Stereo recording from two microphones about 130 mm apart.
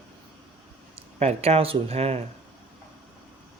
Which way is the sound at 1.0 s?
55° right (ahead or behind).